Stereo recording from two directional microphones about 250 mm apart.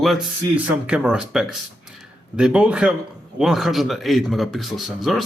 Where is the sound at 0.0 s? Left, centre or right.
Centre.